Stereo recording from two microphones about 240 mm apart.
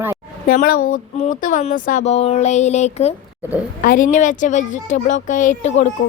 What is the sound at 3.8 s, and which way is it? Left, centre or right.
Speech, left.